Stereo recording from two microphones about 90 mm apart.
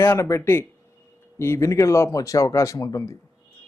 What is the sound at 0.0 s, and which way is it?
Speech, 30° left (ahead or behind).